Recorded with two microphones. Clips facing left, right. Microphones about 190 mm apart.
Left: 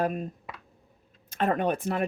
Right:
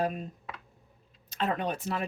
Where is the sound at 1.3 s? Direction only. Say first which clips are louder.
Left 5 dB; 50° left (ahead or behind).